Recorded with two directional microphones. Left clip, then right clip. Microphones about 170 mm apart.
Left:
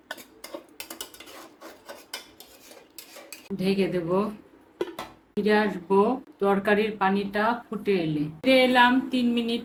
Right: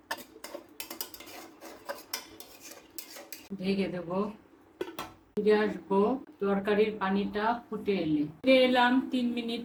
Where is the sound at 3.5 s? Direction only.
60° left (ahead or behind).